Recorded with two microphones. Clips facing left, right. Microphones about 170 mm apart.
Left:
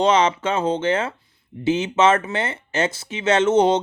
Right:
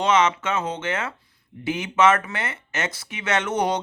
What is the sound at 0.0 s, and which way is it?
Speech, 30° left (ahead or behind).